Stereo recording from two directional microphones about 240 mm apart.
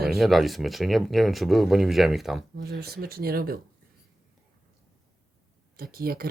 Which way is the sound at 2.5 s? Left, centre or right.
Right.